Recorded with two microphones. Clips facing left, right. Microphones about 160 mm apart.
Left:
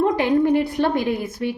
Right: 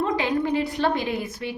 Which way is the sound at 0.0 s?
55° left (ahead or behind).